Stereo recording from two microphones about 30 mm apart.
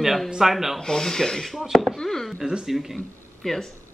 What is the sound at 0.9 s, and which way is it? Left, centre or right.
Speech, centre.